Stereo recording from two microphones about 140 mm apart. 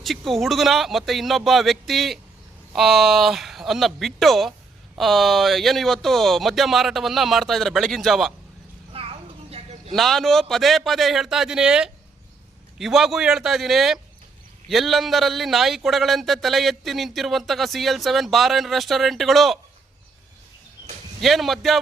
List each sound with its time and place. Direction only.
0.0 s a man's voice: centre (ahead or behind)
8.9 s a sound: 40° right (ahead or behind)
9.9 s a man's voice: centre (ahead or behind)
21.2 s a man's voice: centre (ahead or behind)